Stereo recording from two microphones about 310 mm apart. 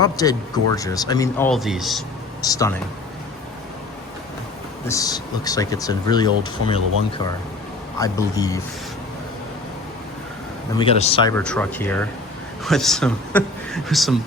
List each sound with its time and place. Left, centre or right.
0.0 s speech: centre
2.4 s speech: centre
4.9 s speech: centre
7.9 s speech: centre
10.8 s speech: centre